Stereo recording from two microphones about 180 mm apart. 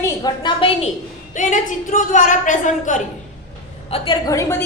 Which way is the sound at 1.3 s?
45° left (ahead or behind).